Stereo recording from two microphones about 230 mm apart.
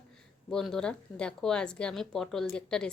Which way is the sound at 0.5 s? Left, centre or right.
Centre.